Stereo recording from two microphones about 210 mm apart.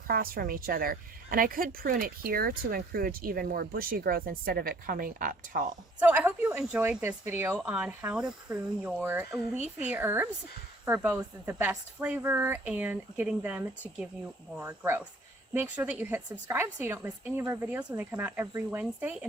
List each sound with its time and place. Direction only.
0.1 s a woman's voice: 45° right (ahead or behind)
6.0 s a woman's voice: 10° right (ahead or behind)